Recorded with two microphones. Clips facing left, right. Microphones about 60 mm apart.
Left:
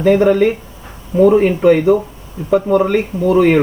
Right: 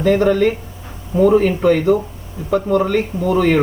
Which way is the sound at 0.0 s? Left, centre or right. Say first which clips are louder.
Left 3 dB; centre.